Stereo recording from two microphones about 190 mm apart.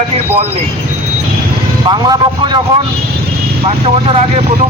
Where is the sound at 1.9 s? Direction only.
25° right (ahead or behind).